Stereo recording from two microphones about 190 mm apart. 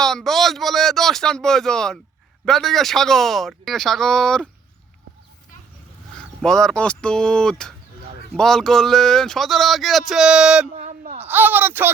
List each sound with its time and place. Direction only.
0.0 s speech: centre (ahead or behind)
6.4 s speech: 5° left (ahead or behind)
10.8 s a sound: 40° right (ahead or behind)
11.3 s speech: 10° right (ahead or behind)